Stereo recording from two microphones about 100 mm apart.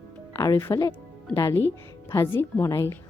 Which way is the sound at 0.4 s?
35° left (ahead or behind).